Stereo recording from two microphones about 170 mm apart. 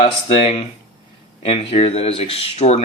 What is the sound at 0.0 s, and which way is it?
Speech, 35° left (ahead or behind).